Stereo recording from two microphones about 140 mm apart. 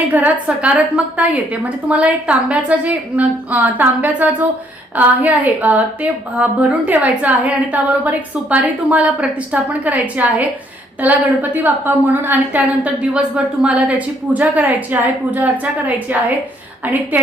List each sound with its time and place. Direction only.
0.1 s a woman's voice: 10° right (ahead or behind)